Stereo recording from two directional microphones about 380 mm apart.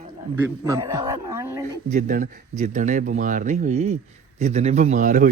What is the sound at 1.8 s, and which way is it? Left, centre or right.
Speech, centre.